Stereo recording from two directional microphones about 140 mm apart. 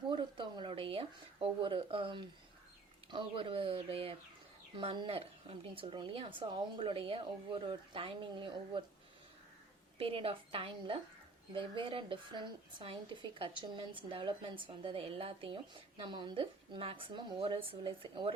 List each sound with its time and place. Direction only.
0.1 s a sound: 35° right (ahead or behind)
3.1 s a woman's voice: 35° right (ahead or behind)
10.0 s a woman's voice: 40° right (ahead or behind)